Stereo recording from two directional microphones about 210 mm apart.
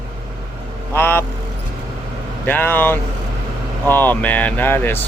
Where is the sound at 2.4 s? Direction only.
10° left (ahead or behind).